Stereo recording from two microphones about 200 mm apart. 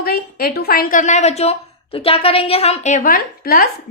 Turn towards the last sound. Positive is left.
turn(degrees=50)  # may be behind; listen again after turning